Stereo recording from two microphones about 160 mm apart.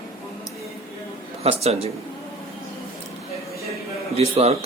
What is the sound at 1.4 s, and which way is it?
Speech, 40° right (ahead or behind).